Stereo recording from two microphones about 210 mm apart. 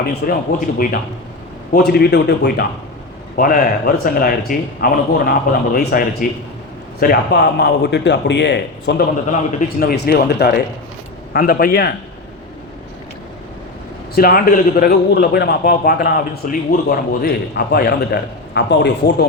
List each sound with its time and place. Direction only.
0.1 s a man's voice: 45° left (ahead or behind)
3.3 s a man's voice: 40° left (ahead or behind)
14.2 s a man's voice: 45° left (ahead or behind)